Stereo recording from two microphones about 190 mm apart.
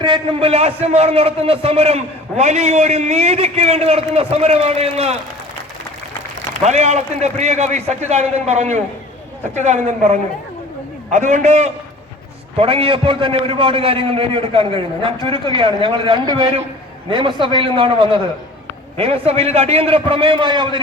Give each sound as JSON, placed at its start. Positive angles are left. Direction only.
{"t": 0.0, "sound": "a man's voice", "side_deg": -30}
{"t": 6.6, "sound": "a man's voice", "side_deg": -35}